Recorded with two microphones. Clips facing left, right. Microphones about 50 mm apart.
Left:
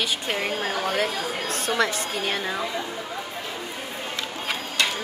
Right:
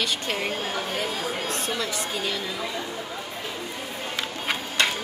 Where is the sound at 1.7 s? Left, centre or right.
Left.